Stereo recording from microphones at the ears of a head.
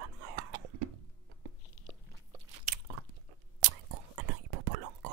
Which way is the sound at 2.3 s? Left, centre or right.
Right.